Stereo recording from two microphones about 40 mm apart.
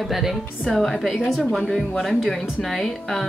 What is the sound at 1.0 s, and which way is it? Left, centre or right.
Speech, centre.